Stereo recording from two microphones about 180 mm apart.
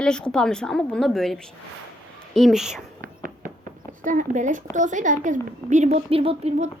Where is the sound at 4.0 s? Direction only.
45° right (ahead or behind).